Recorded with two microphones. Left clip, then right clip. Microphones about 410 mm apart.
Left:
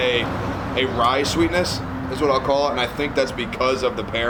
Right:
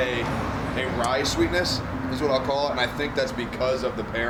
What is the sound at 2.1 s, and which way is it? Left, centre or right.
Speech, left.